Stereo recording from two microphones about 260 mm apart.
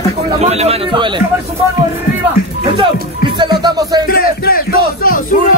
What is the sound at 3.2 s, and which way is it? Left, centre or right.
Music, centre.